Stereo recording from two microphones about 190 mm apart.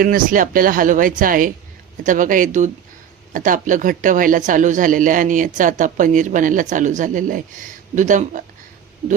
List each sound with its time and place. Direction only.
0.0 s speech: 45° right (ahead or behind)